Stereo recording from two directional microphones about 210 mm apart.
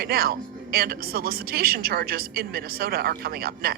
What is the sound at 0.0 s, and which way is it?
Speech, 45° right (ahead or behind).